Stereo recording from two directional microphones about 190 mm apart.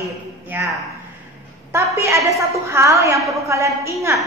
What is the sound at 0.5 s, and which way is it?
Speech, 10° right (ahead or behind).